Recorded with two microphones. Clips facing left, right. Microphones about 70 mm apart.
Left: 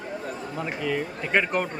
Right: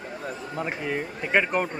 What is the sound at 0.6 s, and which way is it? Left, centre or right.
Speech, right.